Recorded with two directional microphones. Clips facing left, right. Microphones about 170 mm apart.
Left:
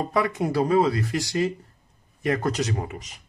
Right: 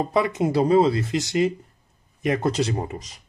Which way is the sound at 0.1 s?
20° right (ahead or behind).